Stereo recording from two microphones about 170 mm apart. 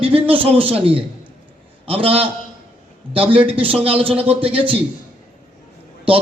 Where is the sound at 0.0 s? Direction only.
30° right (ahead or behind).